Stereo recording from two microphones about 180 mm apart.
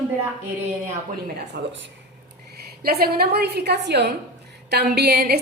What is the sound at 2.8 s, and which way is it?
A woman's voice, 60° right (ahead or behind).